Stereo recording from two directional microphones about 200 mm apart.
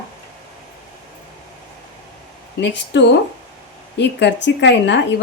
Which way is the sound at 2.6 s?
60° left (ahead or behind).